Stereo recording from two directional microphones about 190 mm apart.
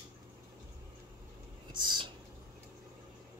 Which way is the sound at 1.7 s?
25° right (ahead or behind).